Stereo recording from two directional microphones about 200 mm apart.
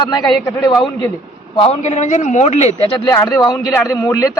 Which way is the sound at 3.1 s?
20° left (ahead or behind).